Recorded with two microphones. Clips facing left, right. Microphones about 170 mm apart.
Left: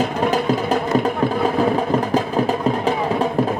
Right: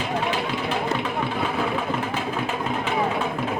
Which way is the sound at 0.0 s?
40° left (ahead or behind).